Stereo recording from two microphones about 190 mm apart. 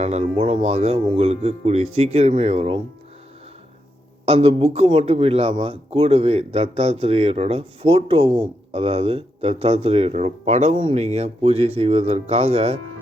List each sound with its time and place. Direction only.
0.0 s a man's voice: 35° right (ahead or behind)
4.3 s a man's voice: 30° right (ahead or behind)